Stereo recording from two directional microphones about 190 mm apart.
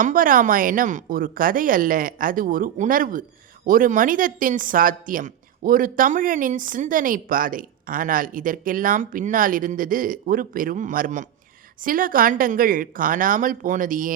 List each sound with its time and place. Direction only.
0.0 s a woman's voice: 45° right (ahead or behind)